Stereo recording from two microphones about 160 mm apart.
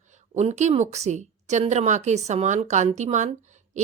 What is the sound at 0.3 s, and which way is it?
Speech, 45° right (ahead or behind).